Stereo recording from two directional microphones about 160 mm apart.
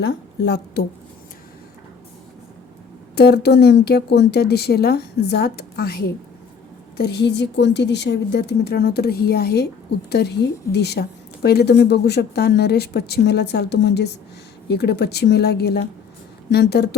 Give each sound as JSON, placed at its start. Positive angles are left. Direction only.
{"t": 0.0, "sound": "speech", "side_deg": 90}
{"t": 3.2, "sound": "speech", "side_deg": 90}
{"t": 6.9, "sound": "speech", "side_deg": 90}